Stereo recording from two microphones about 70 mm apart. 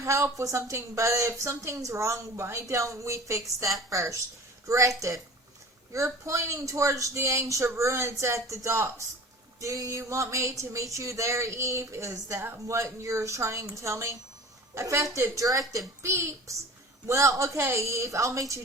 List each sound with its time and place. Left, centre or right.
0.0 s speech: right
6.2 s speech: right
16.0 s a child's voice: right